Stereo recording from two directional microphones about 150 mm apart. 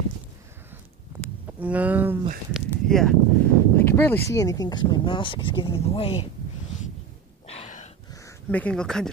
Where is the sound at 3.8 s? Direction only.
15° left (ahead or behind); by 6.3 s 35° left (ahead or behind).